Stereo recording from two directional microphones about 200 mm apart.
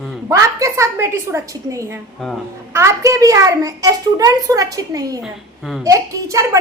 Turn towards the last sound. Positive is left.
turn(degrees=-15)  # may be behind; listen again after turning